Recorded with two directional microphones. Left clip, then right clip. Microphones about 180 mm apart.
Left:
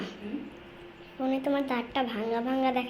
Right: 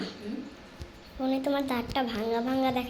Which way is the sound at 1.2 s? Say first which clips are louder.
Even; centre (ahead or behind).